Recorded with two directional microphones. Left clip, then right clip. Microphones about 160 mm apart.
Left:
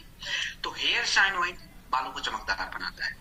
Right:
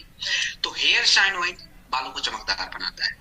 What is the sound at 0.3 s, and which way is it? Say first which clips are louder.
Music: right 6 dB; 15° right (ahead or behind).